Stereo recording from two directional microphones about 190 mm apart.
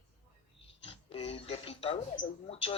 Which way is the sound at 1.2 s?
35° left (ahead or behind).